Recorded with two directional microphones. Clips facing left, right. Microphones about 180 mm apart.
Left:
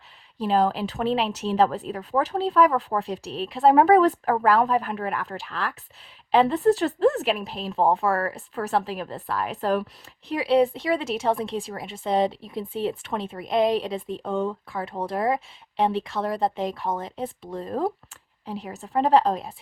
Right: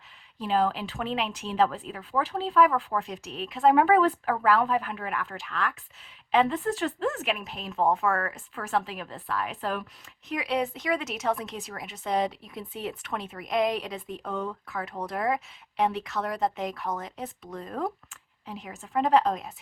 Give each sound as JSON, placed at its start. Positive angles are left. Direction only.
{"t": 0.3, "sound": "a woman's voice", "side_deg": 40}